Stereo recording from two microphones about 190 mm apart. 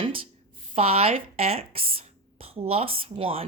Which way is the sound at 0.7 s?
30° right (ahead or behind).